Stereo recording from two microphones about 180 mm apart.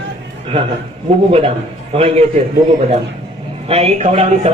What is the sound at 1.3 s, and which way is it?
A man's voice, 30° right (ahead or behind).